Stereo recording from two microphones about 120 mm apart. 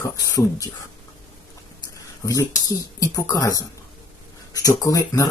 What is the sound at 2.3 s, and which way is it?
Speech, 25° left (ahead or behind).